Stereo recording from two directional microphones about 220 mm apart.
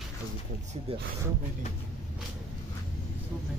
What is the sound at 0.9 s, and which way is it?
Speech, 25° right (ahead or behind).